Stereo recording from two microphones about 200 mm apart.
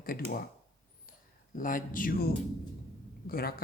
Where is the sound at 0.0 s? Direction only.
45° left (ahead or behind).